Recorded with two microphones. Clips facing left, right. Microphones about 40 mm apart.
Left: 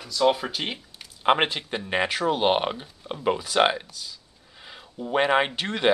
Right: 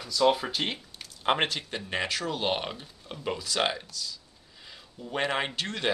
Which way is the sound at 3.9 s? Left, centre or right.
Left.